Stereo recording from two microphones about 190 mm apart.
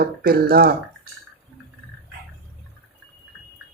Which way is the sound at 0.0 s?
55° right (ahead or behind).